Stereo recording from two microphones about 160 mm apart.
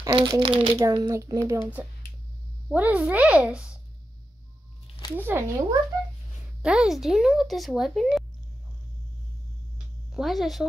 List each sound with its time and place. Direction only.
0.0 s a child's voice: 25° right (ahead or behind)
1.5 s a woman's voice: 10° right (ahead or behind)
5.1 s a woman's voice: 15° right (ahead or behind)
10.1 s speech: centre (ahead or behind)